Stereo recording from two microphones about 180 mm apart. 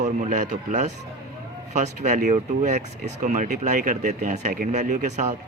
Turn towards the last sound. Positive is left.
turn(degrees=-40)  # may be behind; listen again after turning